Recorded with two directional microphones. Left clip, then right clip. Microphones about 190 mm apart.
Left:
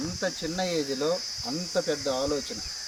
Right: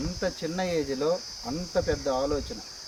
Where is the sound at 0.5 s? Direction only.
10° right (ahead or behind).